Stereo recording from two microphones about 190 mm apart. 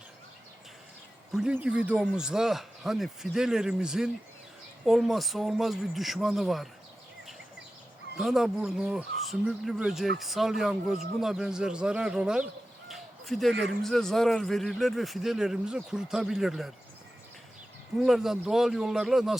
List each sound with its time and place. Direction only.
1.3 s speech: 5° right (ahead or behind)
8.2 s speech: centre (ahead or behind)
12.9 s a sound: centre (ahead or behind)
13.5 s speech: 65° right (ahead or behind)
13.8 s speech: centre (ahead or behind)
18.0 s speech: centre (ahead or behind)